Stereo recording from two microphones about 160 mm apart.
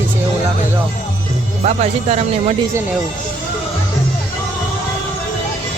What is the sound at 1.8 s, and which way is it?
Speech, 40° right (ahead or behind).